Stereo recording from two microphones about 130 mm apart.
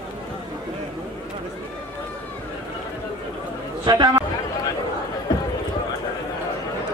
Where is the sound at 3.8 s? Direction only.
35° right (ahead or behind).